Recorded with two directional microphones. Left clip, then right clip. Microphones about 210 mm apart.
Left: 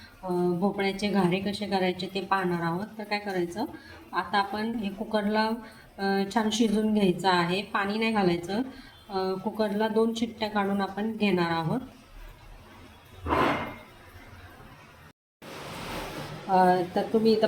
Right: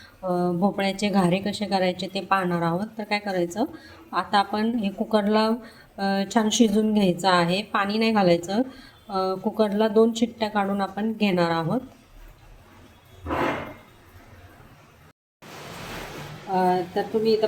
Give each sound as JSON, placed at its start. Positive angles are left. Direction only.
{"t": 0.3, "sound": "a woman's voice", "side_deg": -40}
{"t": 16.5, "sound": "a woman's voice", "side_deg": 5}